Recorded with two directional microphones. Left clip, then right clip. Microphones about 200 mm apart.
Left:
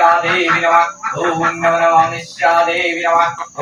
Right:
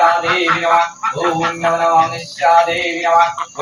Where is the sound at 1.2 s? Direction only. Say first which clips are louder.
Left 2 dB; 30° left (ahead or behind).